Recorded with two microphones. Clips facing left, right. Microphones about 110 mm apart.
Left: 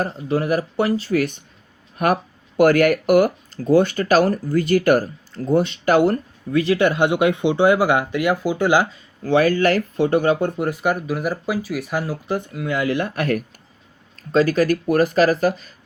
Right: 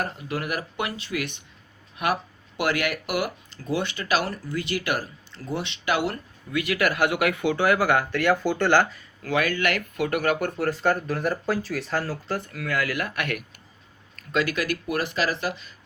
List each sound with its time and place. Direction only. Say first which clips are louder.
0.0 s speech: left 8 dB; 30° left (ahead or behind); by 9.0 s 10° left (ahead or behind)
9.2 s speech: left 8 dB; 35° left (ahead or behind)